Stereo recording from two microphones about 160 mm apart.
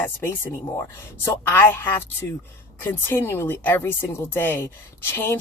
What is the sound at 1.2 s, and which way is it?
Speech, 15° left (ahead or behind).